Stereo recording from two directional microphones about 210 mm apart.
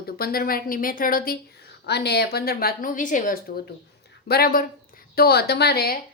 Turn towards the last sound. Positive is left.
turn(degrees=50)  # may be behind; listen again after turning